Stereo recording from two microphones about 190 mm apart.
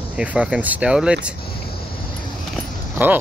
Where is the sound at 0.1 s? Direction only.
5° right (ahead or behind).